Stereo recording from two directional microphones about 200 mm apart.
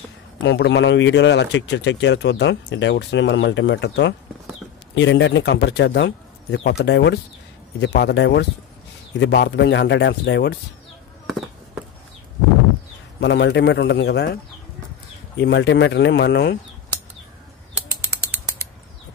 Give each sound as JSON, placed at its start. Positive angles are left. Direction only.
{"t": 0.4, "sound": "speech", "side_deg": 65}
{"t": 13.2, "sound": "speech", "side_deg": 60}